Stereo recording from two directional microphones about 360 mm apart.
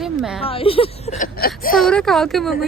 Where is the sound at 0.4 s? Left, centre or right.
Centre.